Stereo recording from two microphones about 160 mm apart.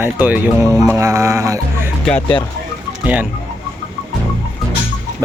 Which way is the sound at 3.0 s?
10° right (ahead or behind).